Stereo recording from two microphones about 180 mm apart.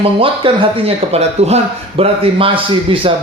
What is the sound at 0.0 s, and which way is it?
A man's voice, 30° right (ahead or behind).